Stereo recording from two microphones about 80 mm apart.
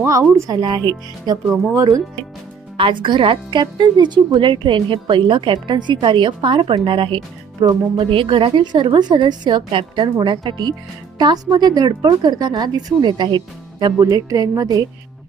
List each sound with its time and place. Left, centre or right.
0.0 s speech: right
1.7 s speech: right
2.8 s speech: right
7.6 s speech: right
8.2 s a woman's voice: right